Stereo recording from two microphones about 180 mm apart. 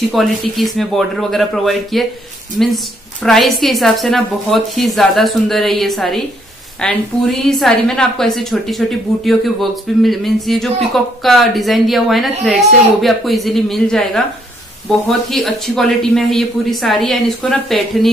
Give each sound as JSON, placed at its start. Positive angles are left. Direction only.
{"t": 0.1, "sound": "a woman's voice", "side_deg": 0}